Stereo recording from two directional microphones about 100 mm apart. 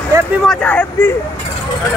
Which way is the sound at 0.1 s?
30° right (ahead or behind).